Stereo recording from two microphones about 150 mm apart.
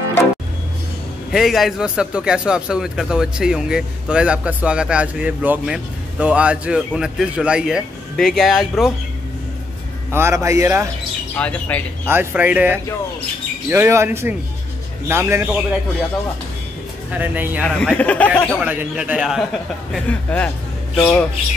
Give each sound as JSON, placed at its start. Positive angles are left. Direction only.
{"t": 1.3, "sound": "speech", "side_deg": 0}
{"t": 10.1, "sound": "a man's voice", "side_deg": -20}
{"t": 11.3, "sound": "speech", "side_deg": 10}
{"t": 12.1, "sound": "a man's voice", "side_deg": -15}
{"t": 17.2, "sound": "a man's voice", "side_deg": -10}
{"t": 17.6, "sound": "speech", "side_deg": 5}
{"t": 18.6, "sound": "a man's voice", "side_deg": -10}
{"t": 20.1, "sound": "a man's voice", "side_deg": 10}